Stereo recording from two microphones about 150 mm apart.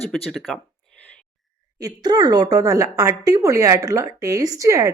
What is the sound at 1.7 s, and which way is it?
A woman's voice, 25° right (ahead or behind).